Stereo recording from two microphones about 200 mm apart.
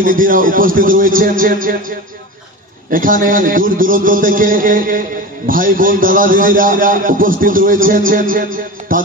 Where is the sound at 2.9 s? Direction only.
45° right (ahead or behind).